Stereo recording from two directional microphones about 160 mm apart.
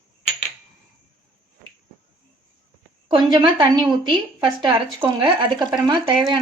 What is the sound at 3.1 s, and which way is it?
A woman's voice, 30° right (ahead or behind).